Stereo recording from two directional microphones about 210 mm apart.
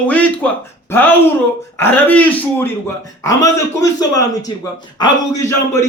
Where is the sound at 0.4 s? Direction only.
10° left (ahead or behind).